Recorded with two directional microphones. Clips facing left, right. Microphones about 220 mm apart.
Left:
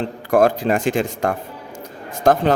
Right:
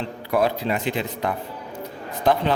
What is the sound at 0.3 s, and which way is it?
Speech, 50° left (ahead or behind).